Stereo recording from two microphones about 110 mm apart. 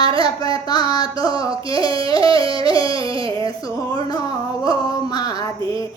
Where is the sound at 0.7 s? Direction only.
35° left (ahead or behind).